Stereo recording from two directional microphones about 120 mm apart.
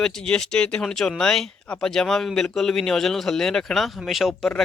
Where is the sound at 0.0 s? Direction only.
5° left (ahead or behind).